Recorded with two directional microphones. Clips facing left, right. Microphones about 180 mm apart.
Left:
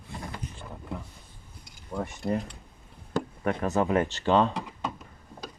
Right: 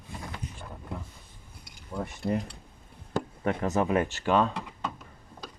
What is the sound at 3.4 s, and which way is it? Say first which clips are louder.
Speech: even; 20° right (ahead or behind).